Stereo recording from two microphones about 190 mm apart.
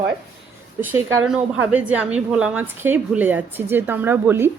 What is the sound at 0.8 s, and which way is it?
A woman's voice, 15° right (ahead or behind).